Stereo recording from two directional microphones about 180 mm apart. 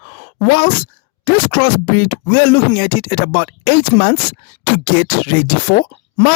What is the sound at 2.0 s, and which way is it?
Speech, 55° left (ahead or behind).